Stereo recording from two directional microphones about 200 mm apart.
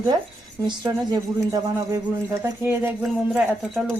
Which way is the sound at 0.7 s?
20° right (ahead or behind).